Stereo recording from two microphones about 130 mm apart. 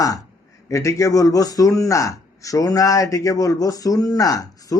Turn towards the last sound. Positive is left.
turn(degrees=25)  # may be behind; listen again after turning